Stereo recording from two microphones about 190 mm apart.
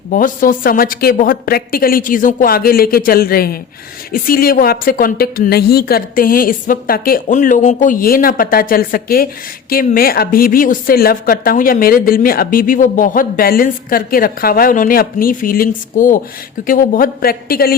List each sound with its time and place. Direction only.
0.1 s a woman's voice: 45° left (ahead or behind)